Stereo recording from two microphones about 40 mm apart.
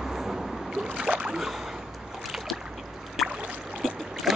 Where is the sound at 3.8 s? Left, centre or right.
Centre.